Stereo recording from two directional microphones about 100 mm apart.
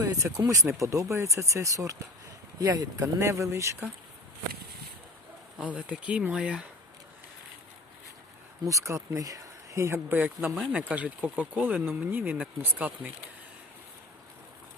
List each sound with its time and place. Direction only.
0.1 s speech: 35° right (ahead or behind)
5.5 s speech: 15° right (ahead or behind)
8.6 s speech: 30° right (ahead or behind)